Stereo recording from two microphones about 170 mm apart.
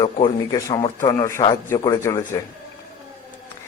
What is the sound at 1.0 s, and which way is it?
A man's voice, 20° left (ahead or behind).